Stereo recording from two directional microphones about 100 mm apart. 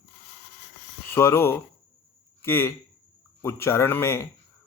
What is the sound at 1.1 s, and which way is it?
A man's voice, 25° left (ahead or behind).